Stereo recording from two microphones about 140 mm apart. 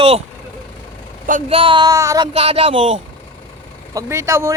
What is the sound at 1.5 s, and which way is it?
Speech, 40° right (ahead or behind).